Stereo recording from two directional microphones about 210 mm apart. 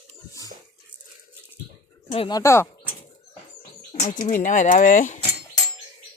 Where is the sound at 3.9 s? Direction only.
35° left (ahead or behind).